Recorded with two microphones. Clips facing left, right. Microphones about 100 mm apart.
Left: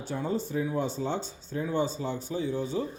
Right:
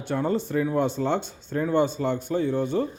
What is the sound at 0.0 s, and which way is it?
Speech, 65° right (ahead or behind).